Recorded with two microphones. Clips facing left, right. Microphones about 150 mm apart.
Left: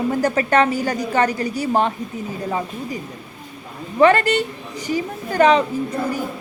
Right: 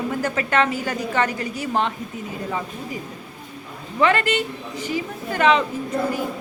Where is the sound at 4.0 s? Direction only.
45° left (ahead or behind).